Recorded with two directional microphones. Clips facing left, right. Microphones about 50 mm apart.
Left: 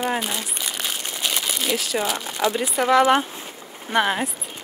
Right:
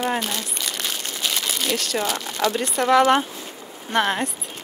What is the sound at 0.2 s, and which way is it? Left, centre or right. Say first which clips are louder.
Speech: even; centre.